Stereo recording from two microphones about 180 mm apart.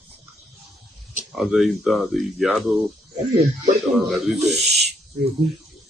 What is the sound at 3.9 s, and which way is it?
Speech, centre (ahead or behind).